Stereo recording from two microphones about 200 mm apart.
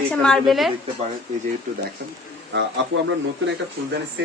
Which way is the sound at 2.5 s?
60° right (ahead or behind).